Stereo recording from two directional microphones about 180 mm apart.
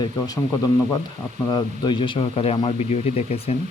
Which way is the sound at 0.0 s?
20° left (ahead or behind).